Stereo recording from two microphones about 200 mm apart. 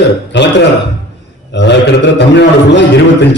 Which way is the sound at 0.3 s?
60° left (ahead or behind).